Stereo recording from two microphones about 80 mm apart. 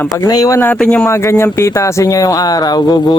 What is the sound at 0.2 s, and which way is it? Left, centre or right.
Speech, left.